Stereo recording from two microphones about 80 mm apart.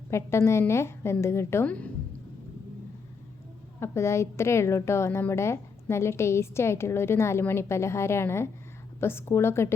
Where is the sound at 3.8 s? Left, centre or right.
Left.